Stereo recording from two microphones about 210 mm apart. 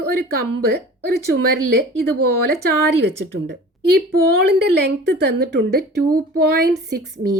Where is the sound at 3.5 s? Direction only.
50° right (ahead or behind).